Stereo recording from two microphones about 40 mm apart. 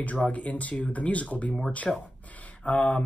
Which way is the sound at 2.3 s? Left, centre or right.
Left.